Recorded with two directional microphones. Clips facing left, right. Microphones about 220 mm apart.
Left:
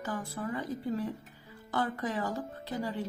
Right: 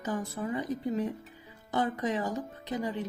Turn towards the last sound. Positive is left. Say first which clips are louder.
# right 2 dB
turn(degrees=-20)  # may be behind; listen again after turning